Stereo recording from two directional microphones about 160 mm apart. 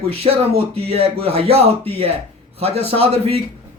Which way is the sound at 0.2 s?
35° right (ahead or behind).